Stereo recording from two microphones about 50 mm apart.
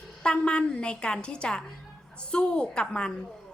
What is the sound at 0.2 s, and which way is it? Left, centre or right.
A woman's voice, left.